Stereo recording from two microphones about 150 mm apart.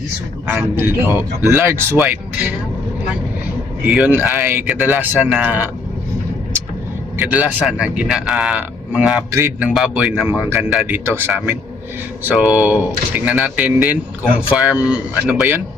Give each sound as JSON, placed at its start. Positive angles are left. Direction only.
{"t": 0.4, "sound": "speech", "side_deg": -10}
{"t": 3.8, "sound": "speech", "side_deg": -10}
{"t": 7.2, "sound": "speech", "side_deg": -10}